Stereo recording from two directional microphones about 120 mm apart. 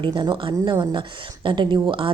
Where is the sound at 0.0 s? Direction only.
40° right (ahead or behind).